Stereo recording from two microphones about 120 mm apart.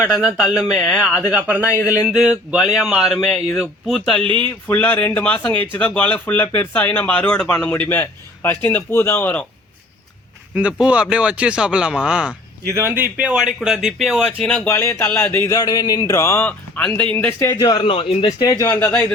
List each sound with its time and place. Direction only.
0.0 s speech: 5° right (ahead or behind)
4.4 s speech: 15° left (ahead or behind)
10.5 s speech: 10° right (ahead or behind)
12.6 s speech: 25° right (ahead or behind); by 14.7 s 10° left (ahead or behind)
14.7 s speech: 20° left (ahead or behind)
15.5 s speech: 35° left (ahead or behind)
17.7 s a man's voice: 50° left (ahead or behind)
18.3 s speech: 30° left (ahead or behind)
18.6 s speech: 15° left (ahead or behind)